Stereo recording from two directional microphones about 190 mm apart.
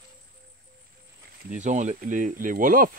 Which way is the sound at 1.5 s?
40° right (ahead or behind).